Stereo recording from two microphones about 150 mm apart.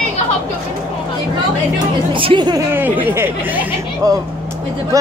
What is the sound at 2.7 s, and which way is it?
Speech, 10° right (ahead or behind).